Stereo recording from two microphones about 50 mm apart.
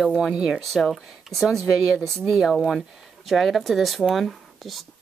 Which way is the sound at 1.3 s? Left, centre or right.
Centre.